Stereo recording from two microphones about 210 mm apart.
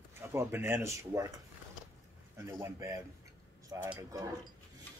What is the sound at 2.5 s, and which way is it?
Speech, 15° right (ahead or behind).